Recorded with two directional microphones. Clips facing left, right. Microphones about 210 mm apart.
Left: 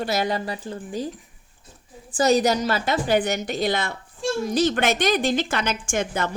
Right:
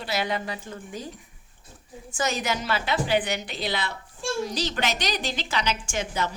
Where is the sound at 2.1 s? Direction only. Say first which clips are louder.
Left 9 dB; 35° left (ahead or behind).